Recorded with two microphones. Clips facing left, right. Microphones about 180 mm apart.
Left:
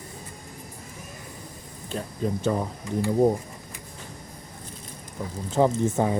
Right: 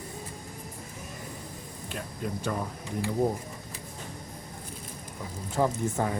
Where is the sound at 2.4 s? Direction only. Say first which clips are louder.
Left 6 dB; 20° left (ahead or behind).